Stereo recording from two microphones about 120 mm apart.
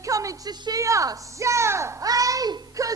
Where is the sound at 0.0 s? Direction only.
30° right (ahead or behind).